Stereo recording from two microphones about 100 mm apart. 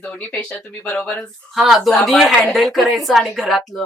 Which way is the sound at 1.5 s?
5° right (ahead or behind).